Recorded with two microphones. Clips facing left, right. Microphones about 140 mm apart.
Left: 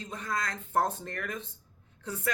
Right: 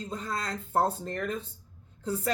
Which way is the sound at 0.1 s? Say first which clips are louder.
Left 1 dB; 30° right (ahead or behind).